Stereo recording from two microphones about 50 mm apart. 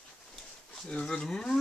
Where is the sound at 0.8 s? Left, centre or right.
Centre.